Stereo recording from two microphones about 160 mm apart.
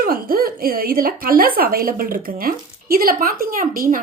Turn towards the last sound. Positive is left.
turn(degrees=-60)  # may be behind; listen again after turning